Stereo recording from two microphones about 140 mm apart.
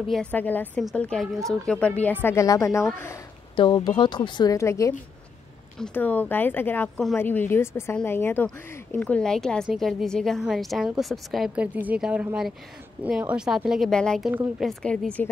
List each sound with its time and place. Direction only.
0.1 s a woman's voice: 10° left (ahead or behind)